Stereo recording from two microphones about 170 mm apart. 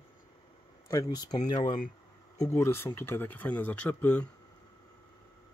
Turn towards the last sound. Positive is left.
turn(degrees=10)  # may be behind; listen again after turning